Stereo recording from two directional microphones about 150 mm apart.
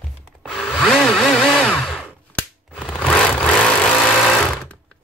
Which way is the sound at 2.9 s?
5° left (ahead or behind).